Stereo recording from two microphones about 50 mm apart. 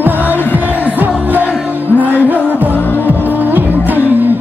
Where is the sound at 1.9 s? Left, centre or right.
Right.